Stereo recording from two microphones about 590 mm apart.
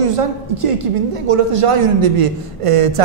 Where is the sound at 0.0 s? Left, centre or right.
Right.